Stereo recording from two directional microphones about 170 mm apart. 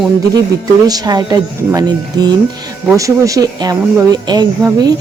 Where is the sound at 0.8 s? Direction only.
20° right (ahead or behind).